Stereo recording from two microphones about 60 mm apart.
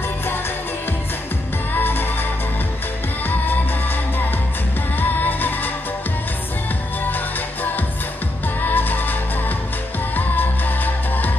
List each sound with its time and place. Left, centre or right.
1.8 s music: left
5.2 s music: left
8.6 s music: left
10.1 s music: left